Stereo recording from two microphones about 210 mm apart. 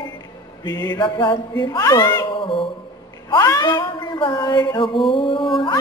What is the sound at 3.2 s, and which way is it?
Female singing, 15° left (ahead or behind).